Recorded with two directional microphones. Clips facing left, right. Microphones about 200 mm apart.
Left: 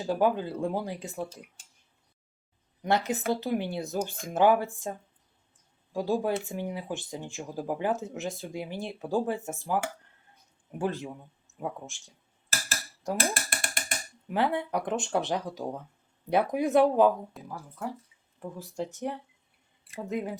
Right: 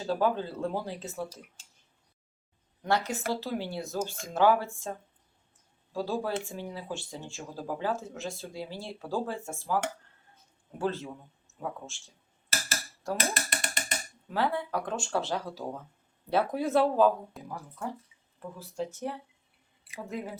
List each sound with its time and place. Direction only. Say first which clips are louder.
0.0 s speech: left 2 dB; 15° left (ahead or behind)
2.8 s speech: left 2 dB; 20° left (ahead or behind)
10.3 s a sound: left 4 dB; 15° left (ahead or behind)
11.9 s speech: right 1 dB; 15° left (ahead or behind)
13.0 s tambourine: left 2 dB; 15° left (ahead or behind)
14.3 s speech: left 2 dB; 20° left (ahead or behind)
17.4 s speech: even; centre (ahead or behind)
18.3 s speech: left 1 dB; 15° left (ahead or behind)